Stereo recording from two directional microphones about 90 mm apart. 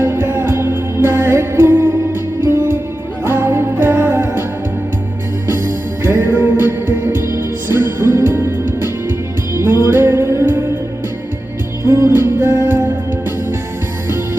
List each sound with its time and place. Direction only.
0.0 s music: 25° right (ahead or behind)
6.0 s music: 25° right (ahead or behind)
11.9 s music: 30° right (ahead or behind)